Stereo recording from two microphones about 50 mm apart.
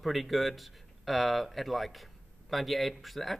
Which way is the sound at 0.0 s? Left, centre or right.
Centre.